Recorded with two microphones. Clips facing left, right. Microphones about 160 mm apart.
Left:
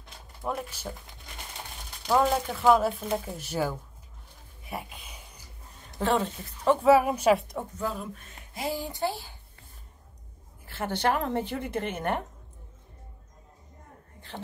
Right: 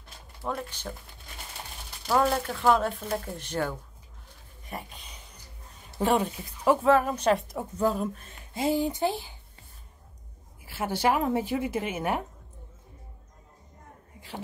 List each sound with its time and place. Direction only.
0.4 s a woman's voice: 5° left (ahead or behind)
2.0 s speech: centre (ahead or behind)
4.6 s a sound: 5° left (ahead or behind)
5.9 s a woman's voice: 15° right (ahead or behind)
6.8 s a woman's voice: 10° left (ahead or behind)
7.8 s speech: 40° right (ahead or behind); by 9.3 s 20° right (ahead or behind)
10.6 s a woman's voice: 10° right (ahead or behind)